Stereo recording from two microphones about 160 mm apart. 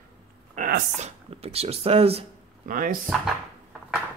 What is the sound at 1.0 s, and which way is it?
Speech, 40° right (ahead or behind).